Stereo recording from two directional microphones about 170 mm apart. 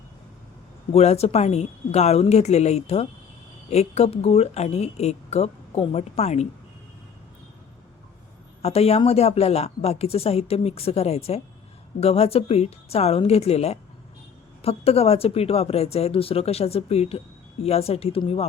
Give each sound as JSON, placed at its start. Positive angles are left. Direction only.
{"t": 0.9, "sound": "a woman's voice", "side_deg": 40}
{"t": 8.6, "sound": "a woman's voice", "side_deg": 35}